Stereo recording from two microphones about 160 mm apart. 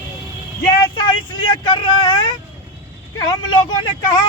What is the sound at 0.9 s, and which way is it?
Speech, 30° left (ahead or behind).